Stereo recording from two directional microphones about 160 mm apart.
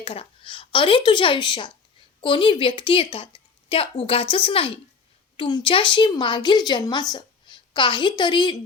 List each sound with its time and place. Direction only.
0.0 s a woman's voice: 35° left (ahead or behind)